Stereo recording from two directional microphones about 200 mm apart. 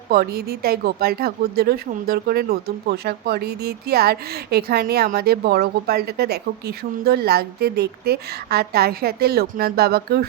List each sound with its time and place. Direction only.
0.1 s speech: 50° right (ahead or behind)